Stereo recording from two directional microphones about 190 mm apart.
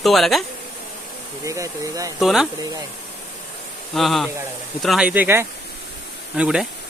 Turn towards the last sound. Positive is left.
turn(degrees=-5)  # may be behind; listen again after turning